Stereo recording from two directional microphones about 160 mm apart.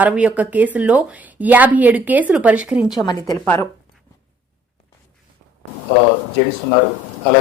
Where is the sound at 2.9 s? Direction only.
25° left (ahead or behind).